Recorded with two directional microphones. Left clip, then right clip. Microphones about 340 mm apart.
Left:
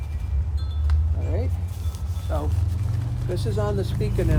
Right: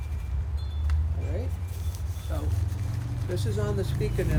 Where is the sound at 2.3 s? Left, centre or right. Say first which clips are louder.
Left 8 dB; centre.